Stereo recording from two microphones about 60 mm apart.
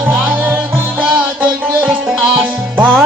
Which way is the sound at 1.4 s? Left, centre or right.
Centre.